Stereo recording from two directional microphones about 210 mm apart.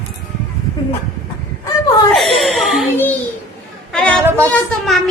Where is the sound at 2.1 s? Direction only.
Centre (ahead or behind).